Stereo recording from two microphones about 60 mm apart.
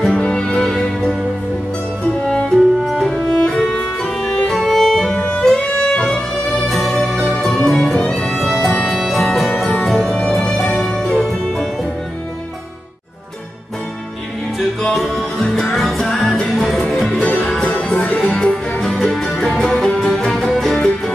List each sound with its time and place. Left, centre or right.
0.1 s music: centre
2.2 s music: centre
3.3 s music: centre
6.7 s music: centre
10.1 s music: centre
10.8 s music: centre
14.6 s music: centre
17.2 s music: left
17.5 s music: centre